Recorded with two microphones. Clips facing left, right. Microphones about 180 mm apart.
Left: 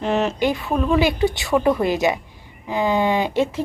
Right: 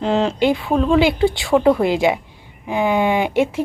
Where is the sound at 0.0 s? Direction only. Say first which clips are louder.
Right 3 dB; 10° right (ahead or behind).